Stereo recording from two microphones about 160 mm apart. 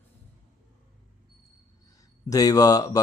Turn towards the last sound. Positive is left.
turn(degrees=25)  # may be behind; listen again after turning